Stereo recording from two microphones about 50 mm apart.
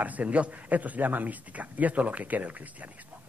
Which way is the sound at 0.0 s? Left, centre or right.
Right.